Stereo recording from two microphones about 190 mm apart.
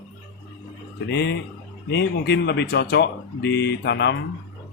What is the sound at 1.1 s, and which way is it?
Speech, 65° left (ahead or behind).